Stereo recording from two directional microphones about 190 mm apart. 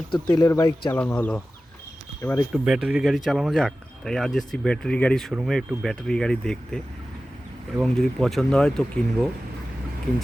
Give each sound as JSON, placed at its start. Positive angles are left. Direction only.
{"t": 0.1, "sound": "speech", "side_deg": 25}
{"t": 0.9, "sound": "speech", "side_deg": 5}
{"t": 2.5, "sound": "speech", "side_deg": 0}
{"t": 7.8, "sound": "speech", "side_deg": 0}